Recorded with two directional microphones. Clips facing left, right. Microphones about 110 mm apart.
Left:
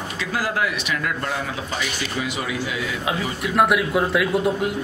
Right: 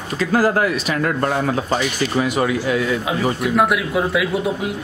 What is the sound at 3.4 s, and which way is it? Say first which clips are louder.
Speech: left 2 dB; centre (ahead or behind).